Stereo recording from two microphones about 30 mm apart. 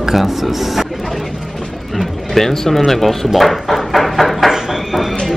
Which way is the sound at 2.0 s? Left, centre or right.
Centre.